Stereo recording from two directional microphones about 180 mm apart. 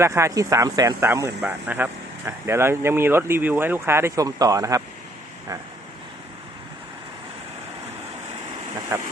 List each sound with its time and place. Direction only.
0.0 s speech: 15° right (ahead or behind)
8.9 s speech: 15° right (ahead or behind)